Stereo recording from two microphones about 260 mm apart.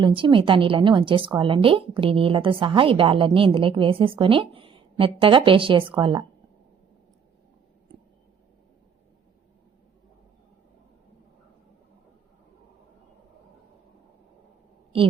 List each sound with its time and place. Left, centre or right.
0.0 s a woman's voice: centre